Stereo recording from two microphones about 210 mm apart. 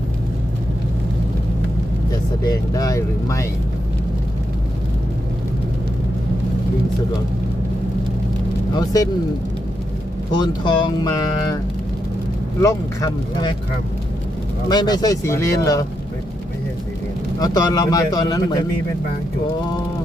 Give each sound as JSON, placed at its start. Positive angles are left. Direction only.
{"t": 2.4, "sound": "speech", "side_deg": 15}
{"t": 8.7, "sound": "speech", "side_deg": 15}
{"t": 10.3, "sound": "speech", "side_deg": 20}
{"t": 12.6, "sound": "speech", "side_deg": 15}
{"t": 14.7, "sound": "speech", "side_deg": 20}
{"t": 17.4, "sound": "speech", "side_deg": 20}